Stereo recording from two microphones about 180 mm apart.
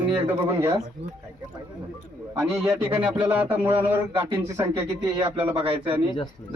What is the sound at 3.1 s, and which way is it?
Music, 10° right (ahead or behind).